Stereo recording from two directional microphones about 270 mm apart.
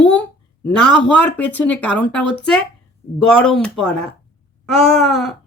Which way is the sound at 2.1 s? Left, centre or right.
Left.